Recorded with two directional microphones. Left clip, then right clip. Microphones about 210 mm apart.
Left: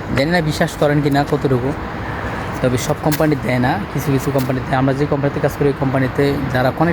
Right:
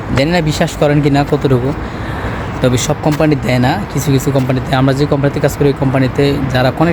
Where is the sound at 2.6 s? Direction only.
10° right (ahead or behind).